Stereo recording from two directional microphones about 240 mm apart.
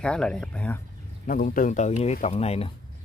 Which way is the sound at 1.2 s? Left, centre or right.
Left.